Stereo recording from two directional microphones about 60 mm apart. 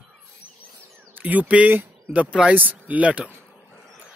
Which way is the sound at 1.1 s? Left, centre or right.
Right.